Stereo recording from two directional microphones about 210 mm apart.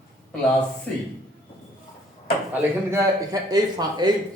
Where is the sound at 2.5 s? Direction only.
10° right (ahead or behind).